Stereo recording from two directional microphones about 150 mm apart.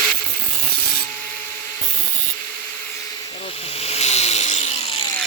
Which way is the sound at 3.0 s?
25° left (ahead or behind).